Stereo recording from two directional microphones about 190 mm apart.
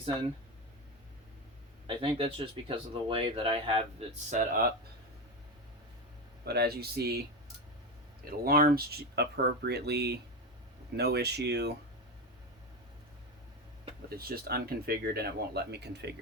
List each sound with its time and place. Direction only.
1.9 s speech: 30° right (ahead or behind)
4.3 s speech: 40° right (ahead or behind)
6.4 s speech: 55° right (ahead or behind)
8.4 s speech: 50° right (ahead or behind)
14.2 s speech: 55° right (ahead or behind)